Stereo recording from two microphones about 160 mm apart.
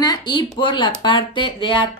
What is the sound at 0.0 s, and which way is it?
Speech, 25° left (ahead or behind).